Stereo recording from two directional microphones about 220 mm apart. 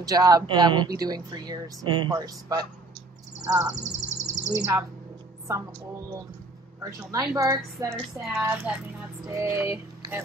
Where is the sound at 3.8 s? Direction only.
30° right (ahead or behind).